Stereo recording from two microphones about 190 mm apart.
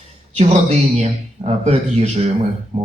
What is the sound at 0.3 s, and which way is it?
A man's voice, 35° right (ahead or behind).